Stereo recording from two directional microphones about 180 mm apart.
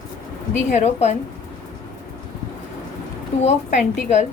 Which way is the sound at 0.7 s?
40° left (ahead or behind).